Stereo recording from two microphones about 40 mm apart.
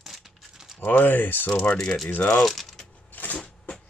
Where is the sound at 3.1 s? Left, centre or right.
Left.